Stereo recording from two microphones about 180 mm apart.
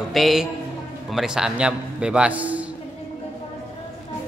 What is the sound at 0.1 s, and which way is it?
A man's voice, centre (ahead or behind).